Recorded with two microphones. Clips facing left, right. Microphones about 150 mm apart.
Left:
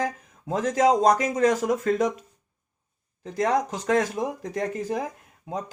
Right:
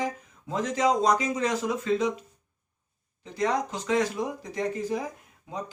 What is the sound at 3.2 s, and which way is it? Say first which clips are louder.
Speech: left 3 dB; 45° left (ahead or behind).